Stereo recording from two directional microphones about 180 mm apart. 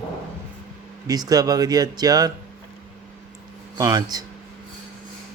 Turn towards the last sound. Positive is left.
turn(degrees=-20)  # may be behind; listen again after turning